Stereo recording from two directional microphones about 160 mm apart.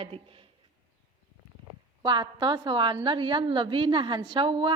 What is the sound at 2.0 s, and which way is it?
A woman's voice, 30° right (ahead or behind).